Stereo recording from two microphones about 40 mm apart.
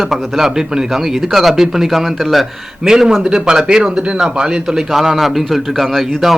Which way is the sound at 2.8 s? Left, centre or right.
Centre.